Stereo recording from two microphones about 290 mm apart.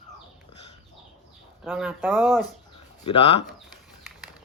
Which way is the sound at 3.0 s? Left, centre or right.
Centre.